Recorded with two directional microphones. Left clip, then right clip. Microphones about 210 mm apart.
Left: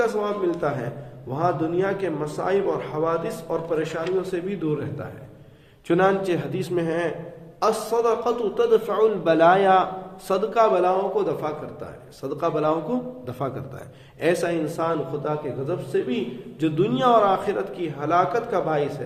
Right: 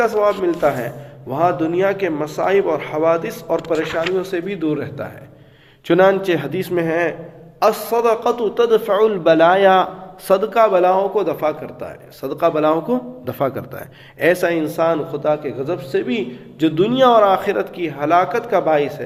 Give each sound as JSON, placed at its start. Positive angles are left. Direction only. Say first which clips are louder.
{"t": 0.0, "sound": "a man's voice", "louder": "right 7 dB", "side_deg": -35}